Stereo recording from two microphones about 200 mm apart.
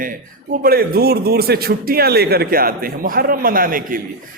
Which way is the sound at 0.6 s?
50° right (ahead or behind).